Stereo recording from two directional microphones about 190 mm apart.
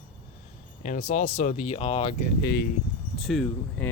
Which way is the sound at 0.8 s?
45° left (ahead or behind).